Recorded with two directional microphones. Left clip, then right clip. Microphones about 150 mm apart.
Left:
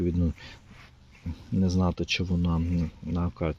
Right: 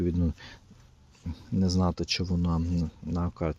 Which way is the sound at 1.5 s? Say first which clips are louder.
Even; 15° right (ahead or behind).